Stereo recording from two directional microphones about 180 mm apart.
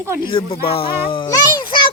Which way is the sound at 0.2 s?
30° left (ahead or behind).